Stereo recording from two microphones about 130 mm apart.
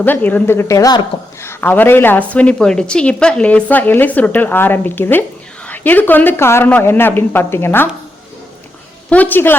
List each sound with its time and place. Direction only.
0.0 s a woman's voice: 15° left (ahead or behind)
1.5 s a woman's voice: 15° left (ahead or behind)
9.0 s a woman's voice: 10° left (ahead or behind)